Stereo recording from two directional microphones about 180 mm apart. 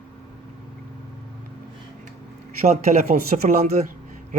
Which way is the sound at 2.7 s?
40° right (ahead or behind).